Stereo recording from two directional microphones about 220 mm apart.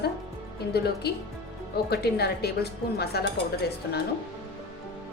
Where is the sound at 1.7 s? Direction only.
45° left (ahead or behind).